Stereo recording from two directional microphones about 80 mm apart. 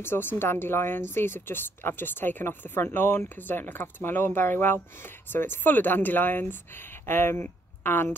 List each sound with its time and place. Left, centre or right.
0.0 s a woman's voice: left